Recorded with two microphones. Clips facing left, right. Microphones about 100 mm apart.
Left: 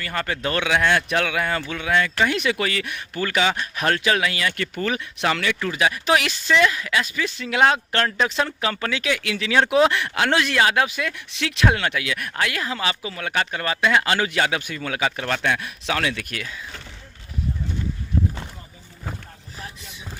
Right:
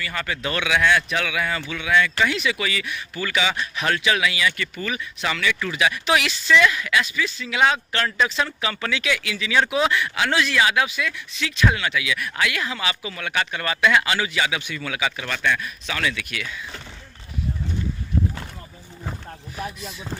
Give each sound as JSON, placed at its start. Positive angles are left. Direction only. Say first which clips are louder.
{"t": 0.0, "sound": "speech", "louder": "left 2 dB", "side_deg": 45}
{"t": 5.6, "sound": "speech", "louder": "left 2 dB", "side_deg": 35}
{"t": 9.3, "sound": "speech", "louder": "left 4 dB", "side_deg": 55}
{"t": 11.3, "sound": "speech", "louder": "left 2 dB", "side_deg": 70}